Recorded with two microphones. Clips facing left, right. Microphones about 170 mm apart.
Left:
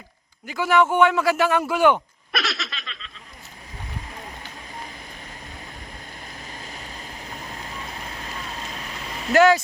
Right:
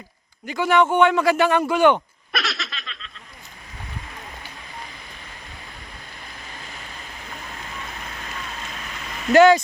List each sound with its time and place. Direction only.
0.4 s speech: 5° left (ahead or behind)
6.4 s vehicle: 40° left (ahead or behind)
9.3 s speech: centre (ahead or behind)